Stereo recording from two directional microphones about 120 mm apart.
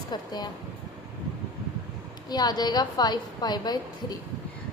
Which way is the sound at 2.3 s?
35° left (ahead or behind).